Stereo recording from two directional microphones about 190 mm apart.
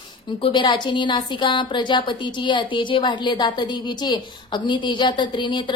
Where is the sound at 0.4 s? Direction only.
25° left (ahead or behind).